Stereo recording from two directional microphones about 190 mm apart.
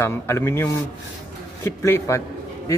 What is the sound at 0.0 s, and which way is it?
A man's voice, 15° left (ahead or behind).